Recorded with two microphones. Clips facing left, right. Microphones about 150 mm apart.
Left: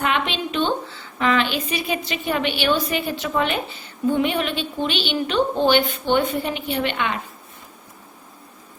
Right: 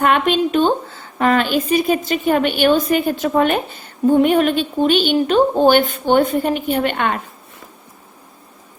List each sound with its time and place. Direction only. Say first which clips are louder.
0.0 s a woman's voice: right 8 dB; 45° right (ahead or behind)